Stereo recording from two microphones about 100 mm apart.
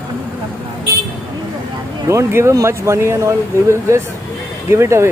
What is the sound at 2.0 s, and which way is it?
Speech, 30° right (ahead or behind).